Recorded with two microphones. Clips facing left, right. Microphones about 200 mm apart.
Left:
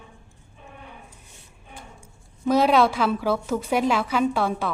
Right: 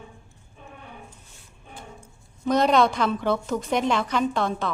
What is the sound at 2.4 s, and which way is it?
A woman's voice, 5° left (ahead or behind).